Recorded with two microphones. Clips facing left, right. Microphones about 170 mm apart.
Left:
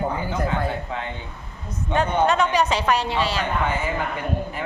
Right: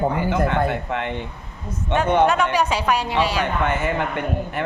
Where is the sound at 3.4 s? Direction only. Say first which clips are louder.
Right 2 dB; 70° right (ahead or behind).